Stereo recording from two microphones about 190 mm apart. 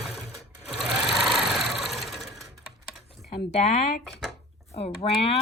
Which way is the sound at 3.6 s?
35° left (ahead or behind).